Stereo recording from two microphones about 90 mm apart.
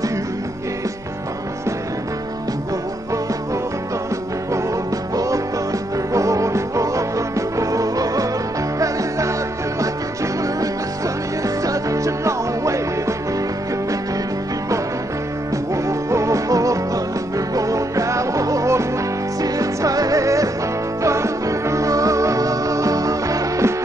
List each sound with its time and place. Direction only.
5.1 s music: 40° right (ahead or behind)
11.4 s music: 40° right (ahead or behind)
15.7 s music: 35° right (ahead or behind)